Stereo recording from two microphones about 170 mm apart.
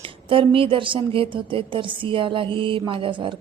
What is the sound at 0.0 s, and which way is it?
A woman's voice, 30° right (ahead or behind).